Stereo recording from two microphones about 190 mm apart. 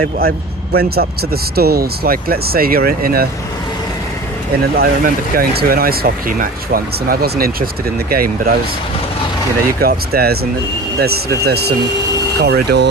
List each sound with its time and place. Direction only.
0.2 s speech: 55° right (ahead or behind)
4.8 s speech: 50° right (ahead or behind)
9.8 s speech: 55° right (ahead or behind)
11.4 s speech: 55° right (ahead or behind)